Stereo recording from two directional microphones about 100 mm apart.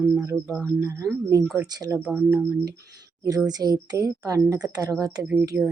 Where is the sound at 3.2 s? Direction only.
35° right (ahead or behind).